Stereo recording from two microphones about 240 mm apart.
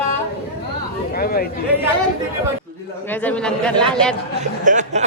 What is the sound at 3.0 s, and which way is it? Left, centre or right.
Speech, centre.